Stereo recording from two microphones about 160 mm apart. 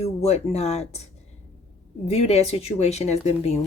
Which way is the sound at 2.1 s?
40° left (ahead or behind).